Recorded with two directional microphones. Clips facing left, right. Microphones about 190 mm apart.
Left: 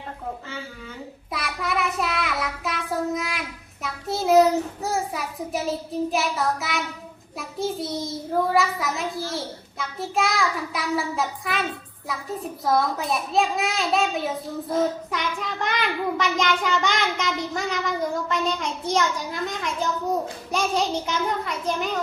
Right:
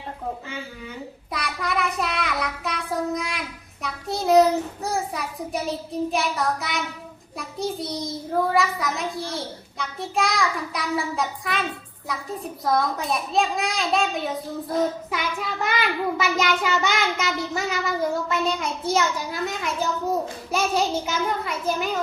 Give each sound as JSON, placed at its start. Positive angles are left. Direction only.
{"t": 1.3, "sound": "a child's voice", "side_deg": 0}